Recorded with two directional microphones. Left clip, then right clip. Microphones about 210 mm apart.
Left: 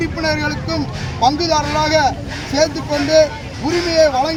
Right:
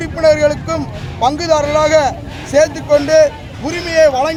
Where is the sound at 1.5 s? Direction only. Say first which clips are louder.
Right 4 dB; 5° right (ahead or behind).